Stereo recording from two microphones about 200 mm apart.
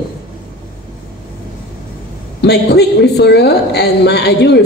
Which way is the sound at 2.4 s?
55° left (ahead or behind).